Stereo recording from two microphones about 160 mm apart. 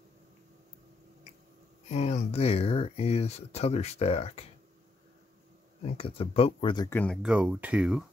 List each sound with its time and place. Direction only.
1.9 s speech: 45° left (ahead or behind)
5.9 s speech: 35° left (ahead or behind)
6.9 s speech: 10° left (ahead or behind)
7.2 s speech: 5° right (ahead or behind)